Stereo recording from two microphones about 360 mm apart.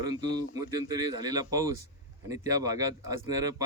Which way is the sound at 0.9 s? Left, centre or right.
Centre.